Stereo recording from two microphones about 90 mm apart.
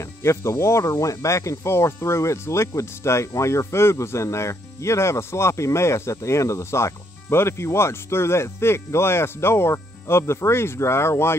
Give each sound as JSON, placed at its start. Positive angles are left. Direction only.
{"t": 0.2, "sound": "speech", "side_deg": 30}